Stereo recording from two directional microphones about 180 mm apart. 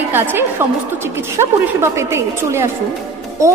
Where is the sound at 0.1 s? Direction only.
10° right (ahead or behind).